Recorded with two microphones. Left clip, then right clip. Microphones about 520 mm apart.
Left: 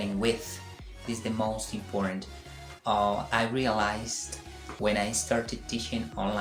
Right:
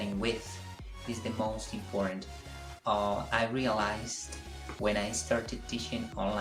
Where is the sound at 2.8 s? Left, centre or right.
Right.